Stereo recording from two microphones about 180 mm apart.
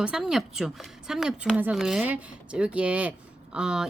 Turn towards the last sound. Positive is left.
turn(degrees=-5)  # may be behind; listen again after turning